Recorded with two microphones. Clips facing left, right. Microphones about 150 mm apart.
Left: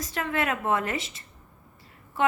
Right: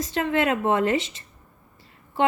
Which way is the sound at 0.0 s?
25° right (ahead or behind).